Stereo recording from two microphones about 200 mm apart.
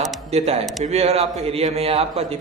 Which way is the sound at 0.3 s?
30° right (ahead or behind).